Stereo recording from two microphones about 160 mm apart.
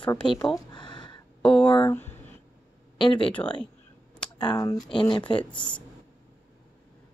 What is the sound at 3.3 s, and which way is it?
Speech, 10° left (ahead or behind).